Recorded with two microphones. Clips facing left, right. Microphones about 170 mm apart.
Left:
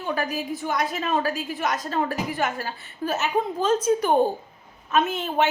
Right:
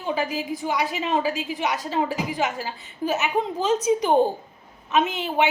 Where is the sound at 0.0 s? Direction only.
10° right (ahead or behind).